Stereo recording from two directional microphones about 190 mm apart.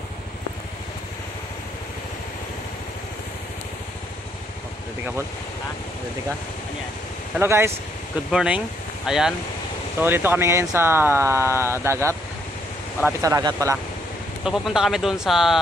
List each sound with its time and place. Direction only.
7.3 s speech: 15° right (ahead or behind)
13.2 s speech: 15° right (ahead or behind)
14.4 s speech: centre (ahead or behind)